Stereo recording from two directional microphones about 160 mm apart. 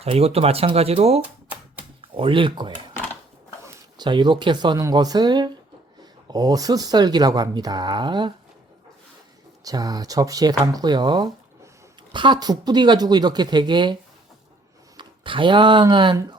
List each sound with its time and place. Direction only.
0.0 s speech: 40° right (ahead or behind)
3.9 s speech: 30° right (ahead or behind)
9.6 s speech: 25° right (ahead or behind)